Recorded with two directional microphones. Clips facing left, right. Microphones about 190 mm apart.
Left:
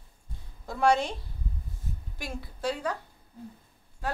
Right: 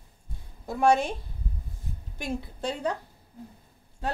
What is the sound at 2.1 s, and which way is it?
Speech, 20° right (ahead or behind).